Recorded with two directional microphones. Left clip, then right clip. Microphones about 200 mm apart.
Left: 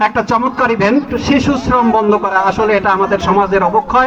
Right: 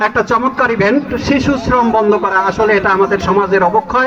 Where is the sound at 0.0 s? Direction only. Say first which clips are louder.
Even; 35° left (ahead or behind).